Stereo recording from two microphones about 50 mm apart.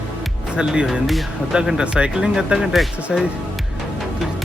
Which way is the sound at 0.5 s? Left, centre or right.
Centre.